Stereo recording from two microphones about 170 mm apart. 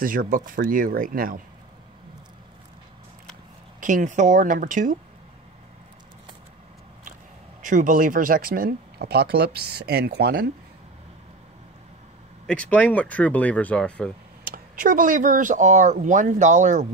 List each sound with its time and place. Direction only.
0.0 s speech: 55° right (ahead or behind)
3.8 s speech: 50° right (ahead or behind)
7.6 s speech: 50° right (ahead or behind); by 10.5 s 70° right (ahead or behind)
12.4 s speech: 10° left (ahead or behind)
14.5 s speech: 55° right (ahead or behind)